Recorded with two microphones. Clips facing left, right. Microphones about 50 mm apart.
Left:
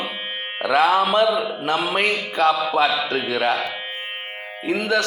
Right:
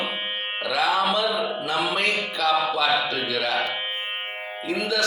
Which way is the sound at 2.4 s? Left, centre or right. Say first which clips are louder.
Left 6 dB; left.